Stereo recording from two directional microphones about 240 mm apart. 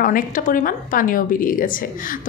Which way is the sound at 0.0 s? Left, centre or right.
Left.